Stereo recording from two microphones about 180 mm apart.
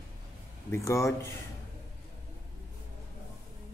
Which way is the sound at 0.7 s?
15° left (ahead or behind).